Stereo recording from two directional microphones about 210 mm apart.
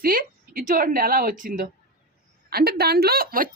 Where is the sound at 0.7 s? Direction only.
45° right (ahead or behind).